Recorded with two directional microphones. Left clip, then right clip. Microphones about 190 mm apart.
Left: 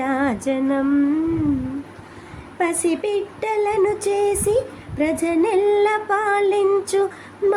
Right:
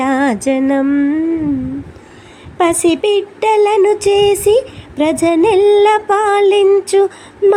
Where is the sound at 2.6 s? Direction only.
25° right (ahead or behind).